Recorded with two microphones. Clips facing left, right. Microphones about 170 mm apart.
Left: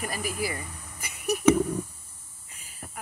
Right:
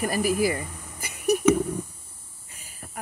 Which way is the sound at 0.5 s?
40° right (ahead or behind).